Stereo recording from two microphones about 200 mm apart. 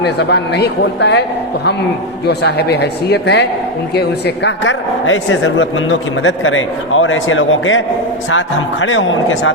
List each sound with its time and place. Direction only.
0.0 s a man's voice: 55° left (ahead or behind)
2.2 s a man's voice: 55° left (ahead or behind)
4.4 s a man's voice: 70° left (ahead or behind)